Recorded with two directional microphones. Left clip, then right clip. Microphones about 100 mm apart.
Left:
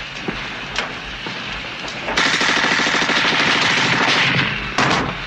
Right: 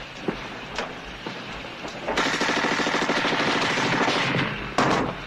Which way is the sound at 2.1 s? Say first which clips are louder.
Left 7 dB; 20° left (ahead or behind).